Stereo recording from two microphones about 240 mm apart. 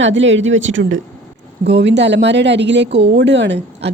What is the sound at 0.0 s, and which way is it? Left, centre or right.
A woman's voice, right.